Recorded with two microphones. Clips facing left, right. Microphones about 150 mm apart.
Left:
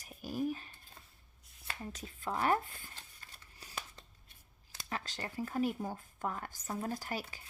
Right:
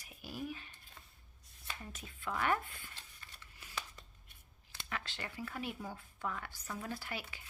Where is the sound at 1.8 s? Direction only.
35° left (ahead or behind).